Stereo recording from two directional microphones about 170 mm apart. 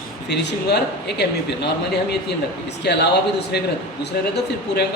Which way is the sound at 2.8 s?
75° left (ahead or behind).